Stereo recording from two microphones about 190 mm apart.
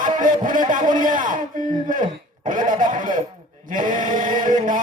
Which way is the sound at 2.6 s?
45° right (ahead or behind).